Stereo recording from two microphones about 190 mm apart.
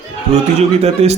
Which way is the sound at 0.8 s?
35° right (ahead or behind).